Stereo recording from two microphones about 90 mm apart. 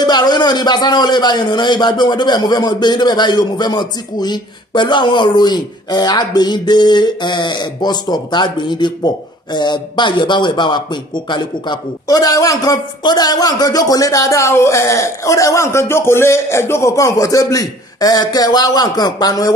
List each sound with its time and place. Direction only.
0.0 s a man's voice: 50° left (ahead or behind)
12.1 s a man's voice: 40° left (ahead or behind)